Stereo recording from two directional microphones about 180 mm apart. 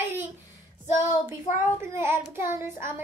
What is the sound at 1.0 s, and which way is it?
Child singing, 15° right (ahead or behind).